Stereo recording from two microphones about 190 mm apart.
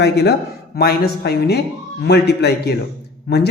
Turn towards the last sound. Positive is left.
turn(degrees=60)  # may be behind; listen again after turning